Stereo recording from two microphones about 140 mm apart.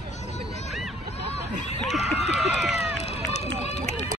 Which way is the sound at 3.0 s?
50° left (ahead or behind).